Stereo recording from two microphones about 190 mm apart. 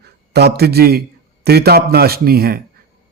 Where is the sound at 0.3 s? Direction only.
60° right (ahead or behind).